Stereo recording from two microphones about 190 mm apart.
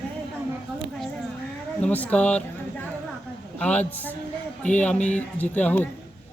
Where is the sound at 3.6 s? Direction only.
5° left (ahead or behind).